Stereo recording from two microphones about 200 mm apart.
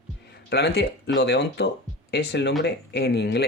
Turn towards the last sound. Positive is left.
turn(degrees=55)  # may be behind; listen again after turning